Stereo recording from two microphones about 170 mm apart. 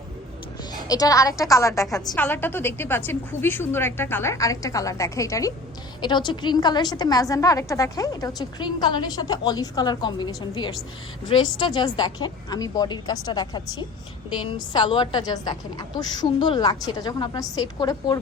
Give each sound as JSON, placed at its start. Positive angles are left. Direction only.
{"t": 0.7, "sound": "a woman's voice", "side_deg": 20}